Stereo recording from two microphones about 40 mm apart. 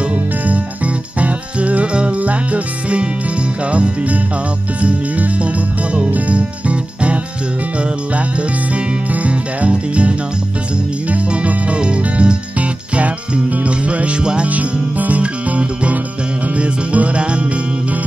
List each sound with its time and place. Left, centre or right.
1.2 s music: right
5.9 s speech: right
8.7 s music: right
13.7 s music: right
14.5 s music: right